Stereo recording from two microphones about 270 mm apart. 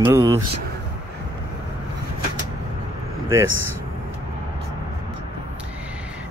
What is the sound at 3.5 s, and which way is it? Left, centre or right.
Speech, right.